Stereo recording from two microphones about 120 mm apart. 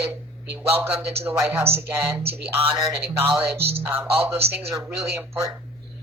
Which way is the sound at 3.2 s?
20° right (ahead or behind).